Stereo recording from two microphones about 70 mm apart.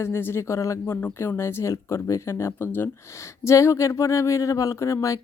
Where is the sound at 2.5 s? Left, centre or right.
Left.